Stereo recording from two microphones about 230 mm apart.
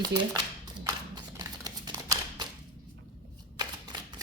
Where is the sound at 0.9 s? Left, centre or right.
Centre.